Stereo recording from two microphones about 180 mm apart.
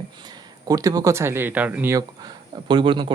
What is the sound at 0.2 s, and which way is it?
Speech, 25° right (ahead or behind).